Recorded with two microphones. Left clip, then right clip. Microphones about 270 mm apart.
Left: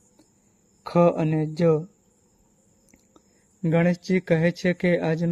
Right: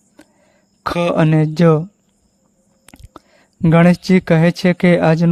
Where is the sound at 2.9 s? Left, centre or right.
Right.